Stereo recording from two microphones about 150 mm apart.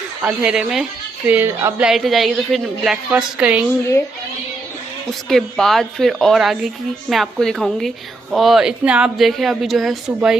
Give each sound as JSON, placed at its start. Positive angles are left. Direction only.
{"t": 0.2, "sound": "speech", "side_deg": -10}
{"t": 1.3, "sound": "speech", "side_deg": -15}
{"t": 1.8, "sound": "a woman's voice", "side_deg": 0}
{"t": 5.3, "sound": "a woman's voice", "side_deg": 0}